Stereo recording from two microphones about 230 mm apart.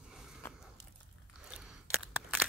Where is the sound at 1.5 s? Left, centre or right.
Centre.